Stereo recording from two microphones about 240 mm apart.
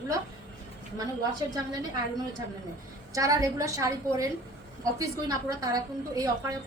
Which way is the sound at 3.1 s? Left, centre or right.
Centre.